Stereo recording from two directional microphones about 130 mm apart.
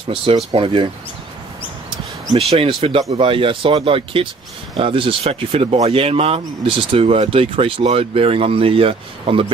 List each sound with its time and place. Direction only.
0.1 s speech: 40° right (ahead or behind)
2.3 s speech: 45° right (ahead or behind)